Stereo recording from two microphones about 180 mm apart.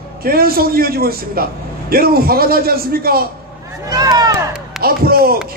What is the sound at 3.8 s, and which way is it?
Speech, 20° right (ahead or behind).